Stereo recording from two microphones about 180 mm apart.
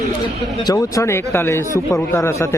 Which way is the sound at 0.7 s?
20° left (ahead or behind).